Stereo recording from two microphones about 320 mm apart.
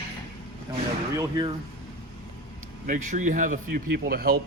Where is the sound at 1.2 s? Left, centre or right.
Centre.